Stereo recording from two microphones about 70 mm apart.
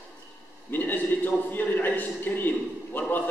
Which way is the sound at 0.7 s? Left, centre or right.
Left.